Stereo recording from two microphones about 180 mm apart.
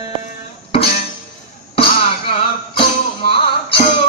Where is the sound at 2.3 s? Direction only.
30° left (ahead or behind).